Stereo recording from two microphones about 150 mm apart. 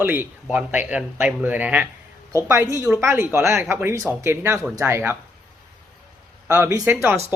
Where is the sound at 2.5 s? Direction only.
20° right (ahead or behind).